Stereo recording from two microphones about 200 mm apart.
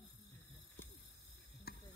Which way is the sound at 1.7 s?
55° left (ahead or behind).